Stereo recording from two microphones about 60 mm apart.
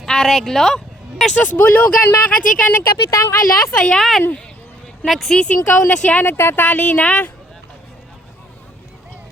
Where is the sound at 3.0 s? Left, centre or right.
Left.